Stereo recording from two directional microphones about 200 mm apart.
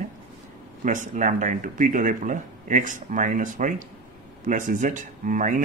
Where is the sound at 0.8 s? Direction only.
40° right (ahead or behind).